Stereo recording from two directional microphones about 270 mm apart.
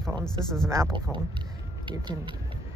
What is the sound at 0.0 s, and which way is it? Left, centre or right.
Speech, centre.